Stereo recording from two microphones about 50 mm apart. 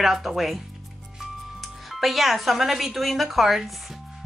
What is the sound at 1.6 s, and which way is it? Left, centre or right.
Speech, centre.